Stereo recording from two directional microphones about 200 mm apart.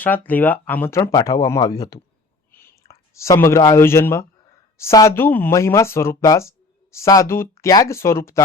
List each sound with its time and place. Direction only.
0.3 s speech: 10° left (ahead or behind)
2.5 s a sound: 10° left (ahead or behind)
3.4 s speech: 15° left (ahead or behind)